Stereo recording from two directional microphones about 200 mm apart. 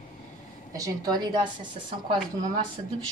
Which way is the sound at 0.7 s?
20° right (ahead or behind).